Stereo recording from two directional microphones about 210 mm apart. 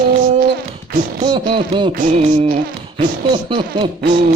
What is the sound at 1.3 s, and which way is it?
Beatboxing, 25° right (ahead or behind).